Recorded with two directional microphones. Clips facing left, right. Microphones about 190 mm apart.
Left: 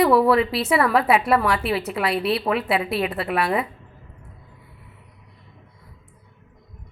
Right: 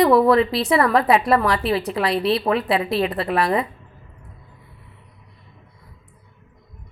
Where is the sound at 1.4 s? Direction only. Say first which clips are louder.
Right 2 dB; 35° right (ahead or behind).